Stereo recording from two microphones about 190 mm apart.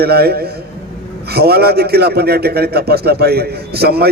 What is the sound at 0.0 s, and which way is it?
A man's voice, 55° right (ahead or behind).